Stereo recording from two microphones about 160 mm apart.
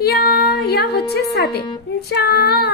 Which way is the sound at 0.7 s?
80° left.